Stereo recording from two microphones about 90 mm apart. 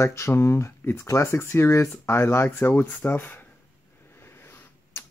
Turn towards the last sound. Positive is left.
turn(degrees=25)  # may be behind; listen again after turning